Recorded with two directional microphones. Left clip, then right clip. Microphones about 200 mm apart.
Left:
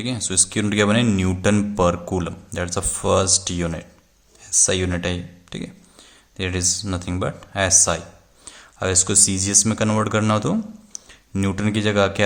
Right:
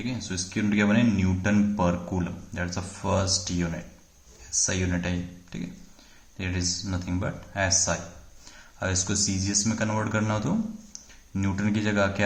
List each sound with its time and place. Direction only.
0.0 s a man's voice: 45° left (ahead or behind)
8.8 s speech: 35° left (ahead or behind)
10.9 s tick-tock: 40° left (ahead or behind)
11.3 s speech: 35° left (ahead or behind)